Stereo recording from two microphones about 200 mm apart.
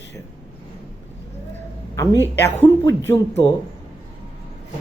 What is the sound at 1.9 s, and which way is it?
A woman's voice, 15° left (ahead or behind).